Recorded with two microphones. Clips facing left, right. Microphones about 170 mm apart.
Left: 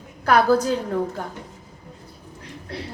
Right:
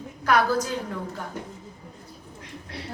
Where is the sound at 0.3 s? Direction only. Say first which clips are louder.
Left 5 dB; 30° left (ahead or behind).